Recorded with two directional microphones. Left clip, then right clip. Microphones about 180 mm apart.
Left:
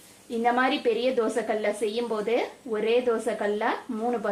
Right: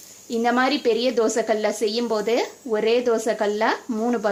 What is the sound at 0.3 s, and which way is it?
A woman's voice, 70° right (ahead or behind).